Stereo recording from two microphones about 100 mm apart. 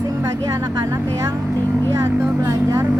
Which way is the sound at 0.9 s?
30° right (ahead or behind).